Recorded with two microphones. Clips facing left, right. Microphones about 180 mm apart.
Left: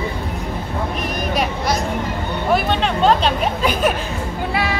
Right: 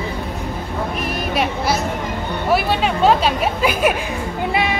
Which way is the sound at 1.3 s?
Centre (ahead or behind).